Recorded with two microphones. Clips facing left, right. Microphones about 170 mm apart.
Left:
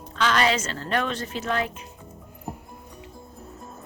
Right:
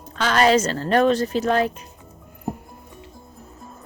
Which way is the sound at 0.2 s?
45° right (ahead or behind).